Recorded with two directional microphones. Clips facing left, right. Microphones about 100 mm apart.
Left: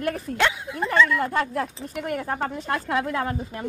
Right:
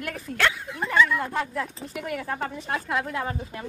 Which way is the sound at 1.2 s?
60° left (ahead or behind).